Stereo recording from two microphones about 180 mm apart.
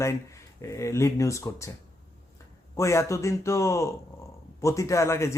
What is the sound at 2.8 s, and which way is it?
Speech, 15° left (ahead or behind).